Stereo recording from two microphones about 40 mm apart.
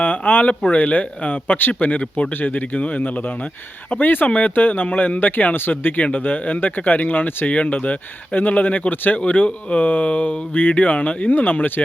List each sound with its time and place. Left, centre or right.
0.0 s a sound: left
0.7 s speech: left
1.9 s speech: left
2.3 s speech: left
2.7 s speech: left
4.3 s speech: left
5.5 s speech: left
6.1 s speech: left
7.4 s speech: left